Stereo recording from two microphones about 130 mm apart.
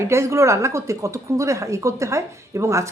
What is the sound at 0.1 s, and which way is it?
A woman's voice, 20° right (ahead or behind).